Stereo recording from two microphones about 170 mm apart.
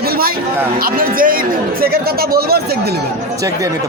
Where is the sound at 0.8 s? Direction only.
60° right (ahead or behind).